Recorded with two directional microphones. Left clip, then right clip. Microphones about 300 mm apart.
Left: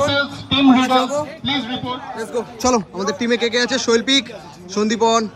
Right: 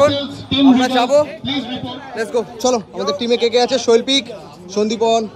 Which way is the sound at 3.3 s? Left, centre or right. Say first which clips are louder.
Right 4 dB; centre.